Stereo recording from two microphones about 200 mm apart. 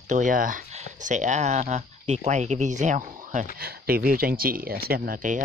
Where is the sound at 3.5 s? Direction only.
50° right (ahead or behind).